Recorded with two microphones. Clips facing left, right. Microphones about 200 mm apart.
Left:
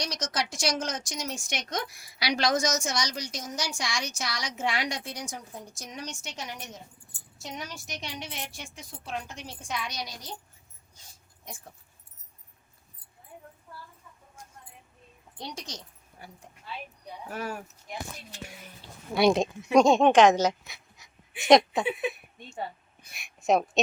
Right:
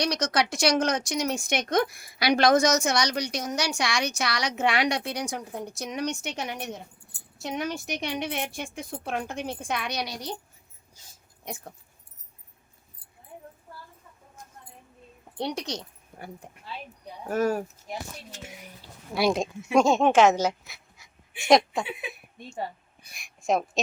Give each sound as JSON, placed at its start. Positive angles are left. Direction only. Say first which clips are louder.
{"t": 0.0, "sound": "speech", "louder": "right 7 dB", "side_deg": -65}
{"t": 15.4, "sound": "speech", "louder": "right 9 dB", "side_deg": -65}
{"t": 17.2, "sound": "speech", "louder": "right 11 dB", "side_deg": -45}
{"t": 18.4, "sound": "speech", "louder": "right 2 dB", "side_deg": -15}
{"t": 19.1, "sound": "speech", "louder": "left 2 dB", "side_deg": 0}
{"t": 23.5, "sound": "speech", "louder": "left 2 dB", "side_deg": 0}